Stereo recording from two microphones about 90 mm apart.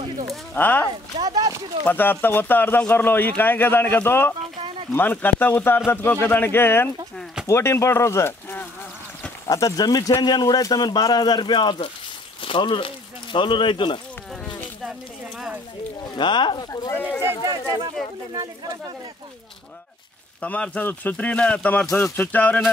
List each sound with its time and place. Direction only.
0.6 s speech: 20° left (ahead or behind)
1.2 s speech: 45° right (ahead or behind)
1.9 s speech: 20° left (ahead or behind)
9.5 s a man's voice: 40° left (ahead or behind); by 11.9 s 60° left (ahead or behind)
12.4 s speech: 75° left (ahead or behind)
16.2 s speech: 60° left (ahead or behind)
16.9 s speech: 15° left (ahead or behind)
17.5 s speech: 40° right (ahead or behind)
20.4 s speech: 15° left (ahead or behind)